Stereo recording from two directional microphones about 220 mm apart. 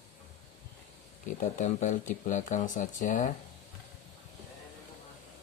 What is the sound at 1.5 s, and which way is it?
Speech, 35° left (ahead or behind).